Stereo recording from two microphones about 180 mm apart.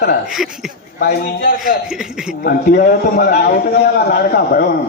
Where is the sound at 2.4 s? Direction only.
60° left (ahead or behind).